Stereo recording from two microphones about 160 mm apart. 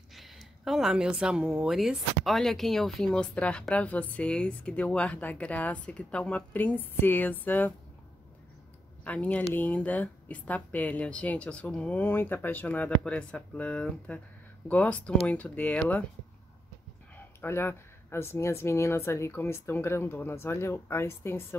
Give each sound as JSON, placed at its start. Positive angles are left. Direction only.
{"t": 0.1, "sound": "speech", "side_deg": 0}
{"t": 9.0, "sound": "speech", "side_deg": 10}
{"t": 17.4, "sound": "speech", "side_deg": 15}